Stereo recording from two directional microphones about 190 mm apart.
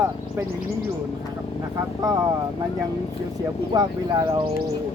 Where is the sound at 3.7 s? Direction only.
20° right (ahead or behind).